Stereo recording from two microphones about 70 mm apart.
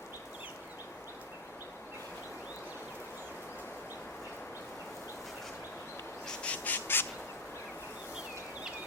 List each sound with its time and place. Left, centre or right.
6.2 s bird: centre